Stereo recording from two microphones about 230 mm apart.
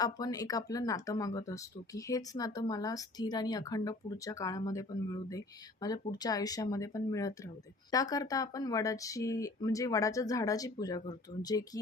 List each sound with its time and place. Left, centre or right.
0.0 s speech: centre